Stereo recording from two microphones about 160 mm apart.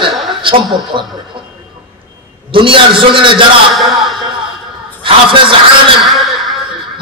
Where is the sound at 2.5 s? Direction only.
35° right (ahead or behind).